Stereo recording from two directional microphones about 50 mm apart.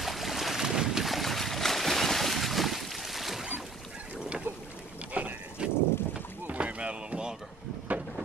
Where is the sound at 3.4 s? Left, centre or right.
Centre.